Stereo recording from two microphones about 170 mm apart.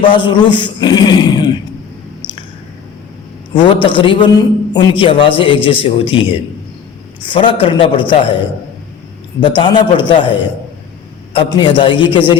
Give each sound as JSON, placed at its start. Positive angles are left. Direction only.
{"t": 0.0, "sound": "a man's voice", "side_deg": 30}
{"t": 3.5, "sound": "a man's voice", "side_deg": 30}
{"t": 7.3, "sound": "a man's voice", "side_deg": 30}
{"t": 9.4, "sound": "a man's voice", "side_deg": 25}
{"t": 11.4, "sound": "a man's voice", "side_deg": 30}